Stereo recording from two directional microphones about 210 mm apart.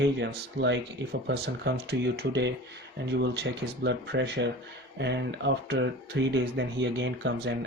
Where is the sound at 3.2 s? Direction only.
55° right (ahead or behind).